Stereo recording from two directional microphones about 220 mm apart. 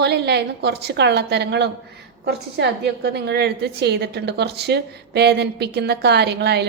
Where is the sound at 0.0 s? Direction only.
50° right (ahead or behind).